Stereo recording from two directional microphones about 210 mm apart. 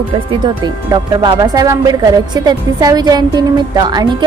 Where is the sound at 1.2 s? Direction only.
20° right (ahead or behind).